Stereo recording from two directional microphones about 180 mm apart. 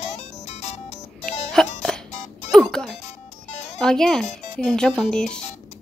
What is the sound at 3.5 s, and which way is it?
Music, 40° left (ahead or behind).